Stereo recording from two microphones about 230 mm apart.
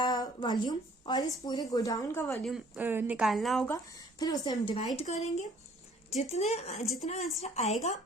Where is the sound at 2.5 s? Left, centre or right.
Centre.